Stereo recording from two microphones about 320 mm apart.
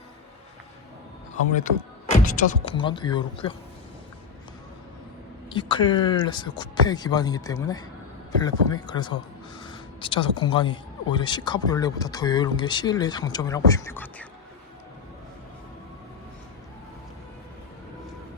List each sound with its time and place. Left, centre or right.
2.0 s speech: left
5.5 s speech: centre